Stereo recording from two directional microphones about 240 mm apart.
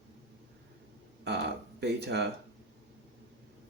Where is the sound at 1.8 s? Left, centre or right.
Right.